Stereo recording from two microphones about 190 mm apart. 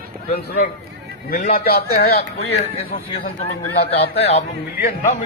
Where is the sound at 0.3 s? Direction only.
50° left (ahead or behind).